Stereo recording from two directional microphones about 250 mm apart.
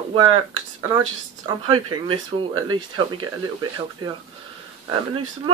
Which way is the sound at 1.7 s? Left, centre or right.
Right.